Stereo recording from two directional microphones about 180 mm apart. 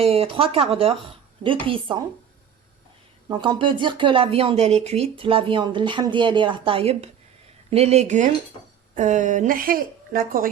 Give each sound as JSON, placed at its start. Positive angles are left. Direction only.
{"t": 0.0, "sound": "speech", "side_deg": -30}
{"t": 3.2, "sound": "a woman's voice", "side_deg": -25}